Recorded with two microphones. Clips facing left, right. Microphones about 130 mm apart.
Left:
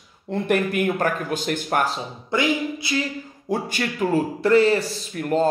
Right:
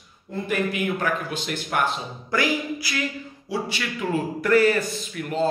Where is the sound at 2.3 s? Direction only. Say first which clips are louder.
Left 2 dB; 25° left (ahead or behind).